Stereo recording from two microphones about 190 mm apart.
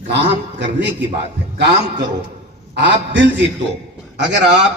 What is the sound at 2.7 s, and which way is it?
A man's voice, 70° right (ahead or behind).